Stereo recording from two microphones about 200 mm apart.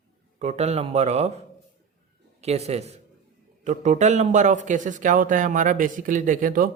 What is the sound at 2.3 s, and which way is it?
A man's voice, 30° right (ahead or behind).